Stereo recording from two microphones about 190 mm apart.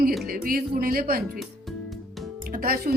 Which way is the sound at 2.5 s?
50° right (ahead or behind).